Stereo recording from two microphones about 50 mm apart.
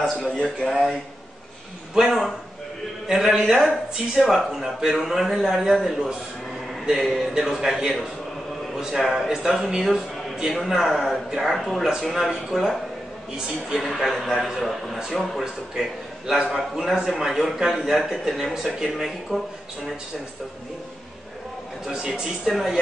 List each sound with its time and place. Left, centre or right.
0.3 s a man's voice: centre
0.7 s speech: centre
2.0 s a man's voice: centre
21.9 s speech: centre